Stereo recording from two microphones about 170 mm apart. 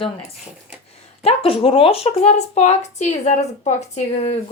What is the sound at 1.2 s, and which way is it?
A woman's voice, 35° left (ahead or behind).